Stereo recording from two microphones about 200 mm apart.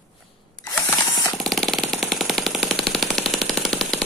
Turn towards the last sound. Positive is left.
turn(degrees=0)  # may be behind; listen again after turning